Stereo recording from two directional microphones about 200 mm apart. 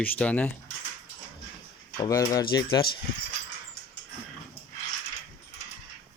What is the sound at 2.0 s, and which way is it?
Speech, 15° left (ahead or behind).